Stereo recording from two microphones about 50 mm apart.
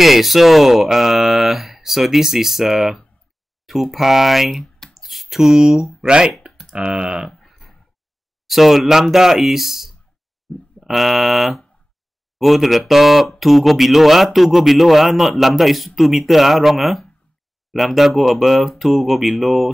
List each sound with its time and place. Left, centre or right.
0.0 s speech: centre
4.9 s a sound: centre
5.9 s speech: centre
6.5 s computer keyboard: centre
6.8 s speech: centre
7.2 s a sound: centre
8.5 s speech: centre